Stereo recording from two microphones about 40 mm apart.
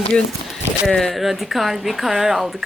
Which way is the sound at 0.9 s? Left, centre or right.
Centre.